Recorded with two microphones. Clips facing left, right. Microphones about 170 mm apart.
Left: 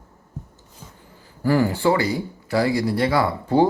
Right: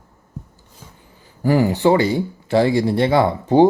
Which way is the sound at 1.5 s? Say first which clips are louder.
Right 3 dB; 20° right (ahead or behind).